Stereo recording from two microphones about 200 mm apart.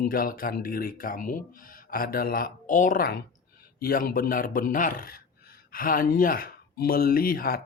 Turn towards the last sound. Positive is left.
turn(degrees=45)  # may be behind; listen again after turning